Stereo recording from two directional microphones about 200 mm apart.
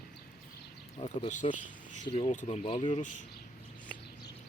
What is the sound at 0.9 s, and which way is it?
Speech, 30° left (ahead or behind).